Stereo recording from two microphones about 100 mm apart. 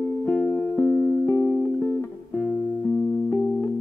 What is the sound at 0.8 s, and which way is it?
Music, 20° left (ahead or behind).